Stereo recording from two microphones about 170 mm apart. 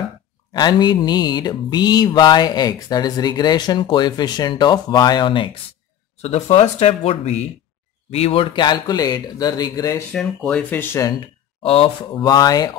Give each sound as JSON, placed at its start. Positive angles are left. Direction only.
{"t": 0.5, "sound": "mantra", "side_deg": 25}
{"t": 6.1, "sound": "speech", "side_deg": 40}
{"t": 8.1, "sound": "mantra", "side_deg": 35}
{"t": 10.1, "sound": "speech", "side_deg": 5}
{"t": 11.6, "sound": "mantra", "side_deg": 35}